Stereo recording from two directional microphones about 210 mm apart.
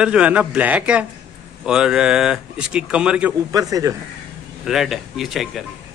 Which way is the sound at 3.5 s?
15° right (ahead or behind).